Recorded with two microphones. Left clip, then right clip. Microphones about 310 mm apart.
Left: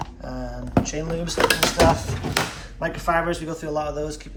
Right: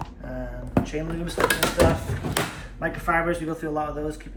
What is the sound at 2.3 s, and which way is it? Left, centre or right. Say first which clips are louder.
Speech: left 3 dB; centre.